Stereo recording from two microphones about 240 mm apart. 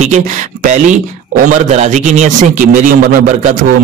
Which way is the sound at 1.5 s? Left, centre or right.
Right.